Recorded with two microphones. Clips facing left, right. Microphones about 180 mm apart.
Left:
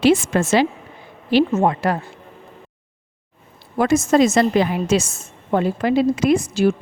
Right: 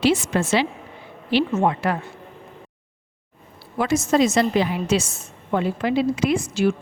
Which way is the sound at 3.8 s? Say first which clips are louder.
Left 4 dB; 50° left (ahead or behind).